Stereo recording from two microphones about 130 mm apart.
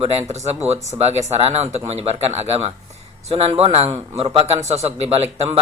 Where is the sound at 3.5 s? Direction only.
50° right (ahead or behind).